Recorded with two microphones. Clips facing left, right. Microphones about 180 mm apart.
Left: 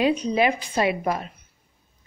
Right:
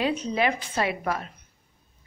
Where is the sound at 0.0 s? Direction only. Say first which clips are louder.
Left 4 dB; 15° left (ahead or behind).